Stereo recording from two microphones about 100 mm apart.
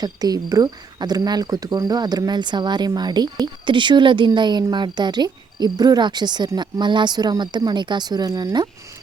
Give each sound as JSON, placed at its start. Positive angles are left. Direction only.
{"t": 0.0, "sound": "speech", "side_deg": -40}